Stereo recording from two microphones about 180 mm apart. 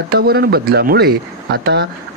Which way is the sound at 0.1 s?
60° right (ahead or behind).